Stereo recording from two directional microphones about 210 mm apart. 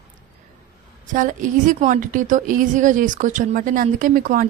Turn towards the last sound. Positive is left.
turn(degrees=-40)  # may be behind; listen again after turning